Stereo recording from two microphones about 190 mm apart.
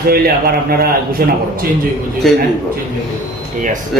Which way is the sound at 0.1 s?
55° right (ahead or behind).